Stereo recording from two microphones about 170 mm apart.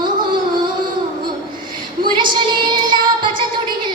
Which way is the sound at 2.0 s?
25° right (ahead or behind).